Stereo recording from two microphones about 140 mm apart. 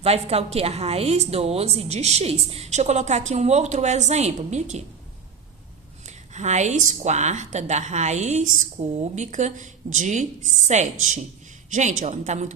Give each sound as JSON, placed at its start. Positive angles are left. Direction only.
{"t": 0.0, "sound": "a woman's voice", "side_deg": -50}
{"t": 6.1, "sound": "a woman's voice", "side_deg": -55}